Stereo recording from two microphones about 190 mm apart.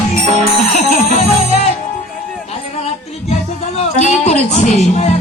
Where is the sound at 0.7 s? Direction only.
35° left (ahead or behind).